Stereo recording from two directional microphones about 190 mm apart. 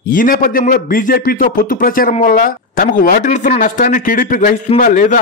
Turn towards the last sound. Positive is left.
turn(degrees=45)  # may be behind; listen again after turning